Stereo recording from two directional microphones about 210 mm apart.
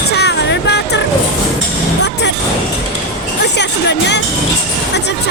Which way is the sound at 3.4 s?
55° left (ahead or behind).